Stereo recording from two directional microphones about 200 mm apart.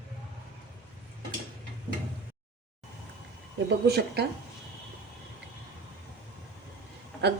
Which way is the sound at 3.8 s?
55° right (ahead or behind).